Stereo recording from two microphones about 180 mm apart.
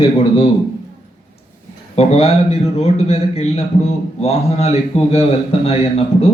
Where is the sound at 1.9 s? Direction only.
35° left (ahead or behind).